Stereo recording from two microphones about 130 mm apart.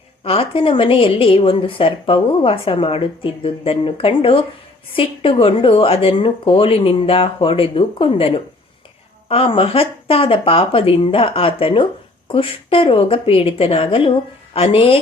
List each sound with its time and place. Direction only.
0.3 s speech: 45° left (ahead or behind)